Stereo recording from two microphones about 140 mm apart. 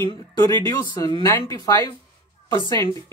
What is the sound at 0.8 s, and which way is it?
Speech, 35° left (ahead or behind).